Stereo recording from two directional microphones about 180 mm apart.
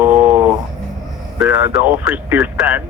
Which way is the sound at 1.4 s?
10° right (ahead or behind).